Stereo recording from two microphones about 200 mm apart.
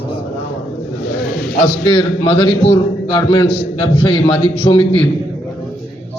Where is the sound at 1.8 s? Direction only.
25° left (ahead or behind).